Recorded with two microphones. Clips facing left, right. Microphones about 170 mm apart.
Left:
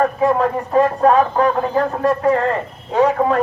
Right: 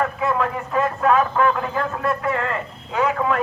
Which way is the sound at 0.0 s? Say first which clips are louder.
Left 6 dB; 35° left (ahead or behind).